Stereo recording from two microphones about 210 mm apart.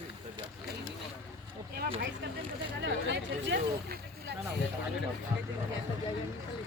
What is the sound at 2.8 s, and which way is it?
Speech, 60° right (ahead or behind).